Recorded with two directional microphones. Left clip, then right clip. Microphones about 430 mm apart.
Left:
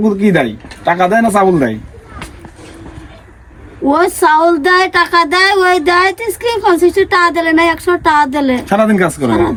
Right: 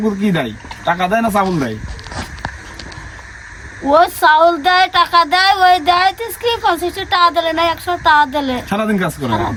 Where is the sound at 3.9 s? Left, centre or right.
Centre.